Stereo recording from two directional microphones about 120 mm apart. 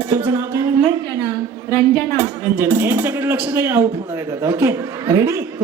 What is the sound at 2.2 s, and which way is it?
A man's voice, 20° right (ahead or behind).